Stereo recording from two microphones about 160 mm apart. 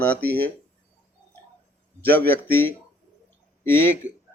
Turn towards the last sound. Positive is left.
turn(degrees=15)  # may be behind; listen again after turning